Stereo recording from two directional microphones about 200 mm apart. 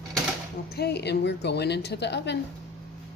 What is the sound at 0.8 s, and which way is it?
A woman's voice, 55° left (ahead or behind).